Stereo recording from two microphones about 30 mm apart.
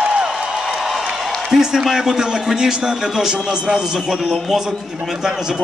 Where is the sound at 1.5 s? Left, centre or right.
Centre.